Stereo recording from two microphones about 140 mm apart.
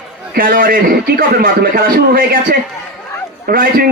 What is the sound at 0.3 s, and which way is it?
A man's voice, 90° right.